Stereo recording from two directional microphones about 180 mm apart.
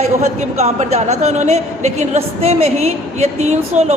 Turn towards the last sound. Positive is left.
turn(degrees=-40)  # may be behind; listen again after turning